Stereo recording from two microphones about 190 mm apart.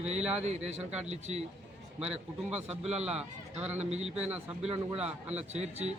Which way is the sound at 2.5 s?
35° right (ahead or behind).